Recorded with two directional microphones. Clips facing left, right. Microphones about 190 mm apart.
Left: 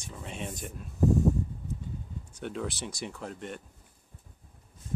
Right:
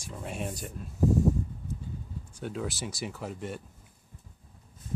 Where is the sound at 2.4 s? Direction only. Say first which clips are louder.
Even; 5° right (ahead or behind).